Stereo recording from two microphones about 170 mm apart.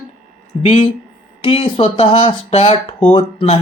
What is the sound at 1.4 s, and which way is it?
Speech, 35° left (ahead or behind).